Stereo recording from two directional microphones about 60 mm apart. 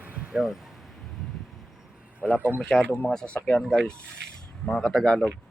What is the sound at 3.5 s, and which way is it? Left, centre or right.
Speech, left.